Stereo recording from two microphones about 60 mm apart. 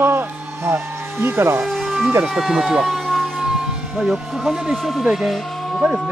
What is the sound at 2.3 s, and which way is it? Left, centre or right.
Speech, centre.